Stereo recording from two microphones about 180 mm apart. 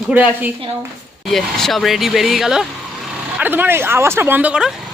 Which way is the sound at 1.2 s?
Centre (ahead or behind).